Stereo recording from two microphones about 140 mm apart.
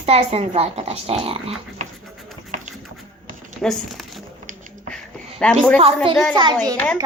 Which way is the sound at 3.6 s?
5° left (ahead or behind).